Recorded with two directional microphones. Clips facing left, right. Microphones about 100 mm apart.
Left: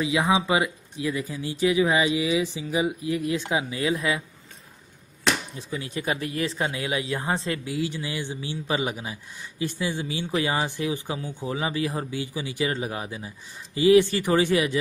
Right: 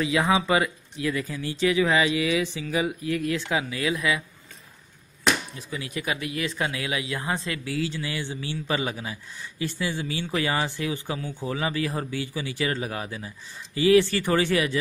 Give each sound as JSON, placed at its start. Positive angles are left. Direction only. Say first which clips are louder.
{"t": 0.0, "sound": "speech", "louder": "even", "side_deg": 15}
{"t": 5.6, "sound": "speech", "louder": "left 1 dB", "side_deg": 30}
{"t": 7.7, "sound": "speech", "louder": "even", "side_deg": 20}